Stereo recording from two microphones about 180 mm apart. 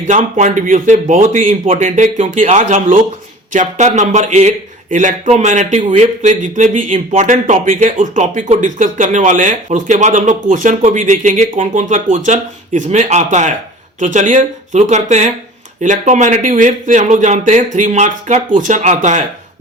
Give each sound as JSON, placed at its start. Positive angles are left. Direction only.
{"t": 0.1, "sound": "speech", "side_deg": -45}